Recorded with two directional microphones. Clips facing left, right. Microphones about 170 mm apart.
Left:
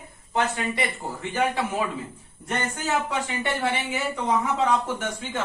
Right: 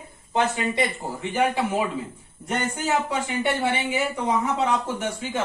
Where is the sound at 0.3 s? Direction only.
20° right (ahead or behind).